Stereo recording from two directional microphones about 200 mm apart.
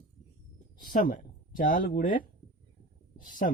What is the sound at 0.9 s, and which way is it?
Speech, 45° left (ahead or behind).